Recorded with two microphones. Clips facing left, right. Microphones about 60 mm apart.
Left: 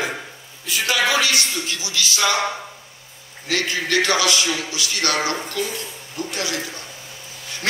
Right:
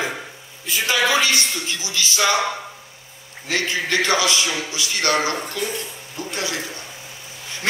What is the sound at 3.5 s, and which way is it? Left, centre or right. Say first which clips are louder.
Speech: even; right.